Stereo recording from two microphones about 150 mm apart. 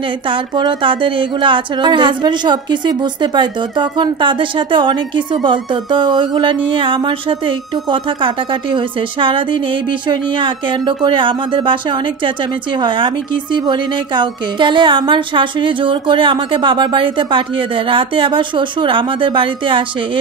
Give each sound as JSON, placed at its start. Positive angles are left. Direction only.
{"t": 0.3, "sound": "a woman's voice", "side_deg": -30}